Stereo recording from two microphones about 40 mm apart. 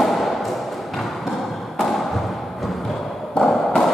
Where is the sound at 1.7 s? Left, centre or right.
Centre.